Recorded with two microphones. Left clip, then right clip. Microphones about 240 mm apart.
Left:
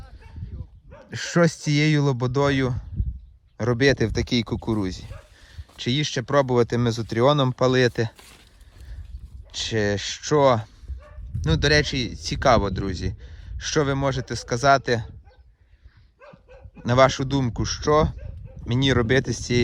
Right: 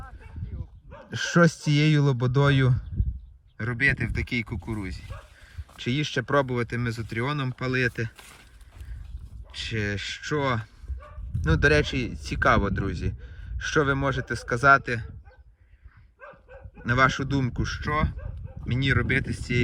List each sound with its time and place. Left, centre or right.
0.9 s a sound: right
1.1 s speech: centre
5.7 s speech: centre
9.5 s speech: centre
16.2 s dog: right
16.8 s speech: centre